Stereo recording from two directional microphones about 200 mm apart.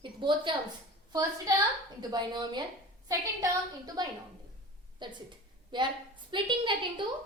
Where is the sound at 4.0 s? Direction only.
20° right (ahead or behind).